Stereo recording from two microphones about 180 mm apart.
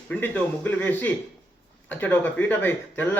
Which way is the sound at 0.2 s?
10° left (ahead or behind).